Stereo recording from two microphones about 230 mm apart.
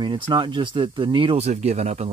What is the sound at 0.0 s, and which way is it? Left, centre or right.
Speech, right.